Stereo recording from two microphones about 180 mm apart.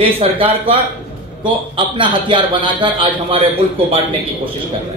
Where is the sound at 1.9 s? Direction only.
25° right (ahead or behind).